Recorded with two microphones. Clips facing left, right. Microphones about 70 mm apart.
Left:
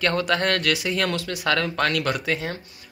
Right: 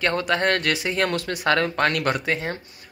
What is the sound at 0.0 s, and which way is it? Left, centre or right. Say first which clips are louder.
Speech: even; right.